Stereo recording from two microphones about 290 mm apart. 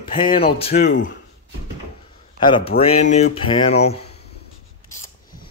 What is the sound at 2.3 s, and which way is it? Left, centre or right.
A man's voice, centre.